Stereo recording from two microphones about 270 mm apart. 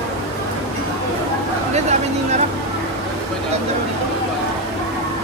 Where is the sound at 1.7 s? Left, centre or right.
Right.